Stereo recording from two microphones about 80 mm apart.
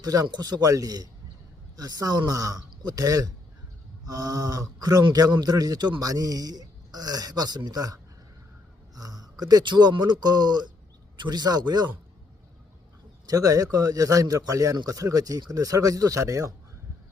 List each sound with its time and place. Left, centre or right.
0.0 s a man's voice: right
9.0 s speech: right
13.2 s a man's voice: right